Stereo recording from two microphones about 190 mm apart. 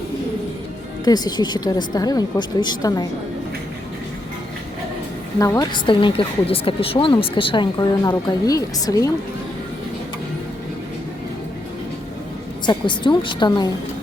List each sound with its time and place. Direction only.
1.0 s speech: 20° left (ahead or behind)
5.4 s a woman's voice: 15° left (ahead or behind)
12.6 s speech: 25° left (ahead or behind)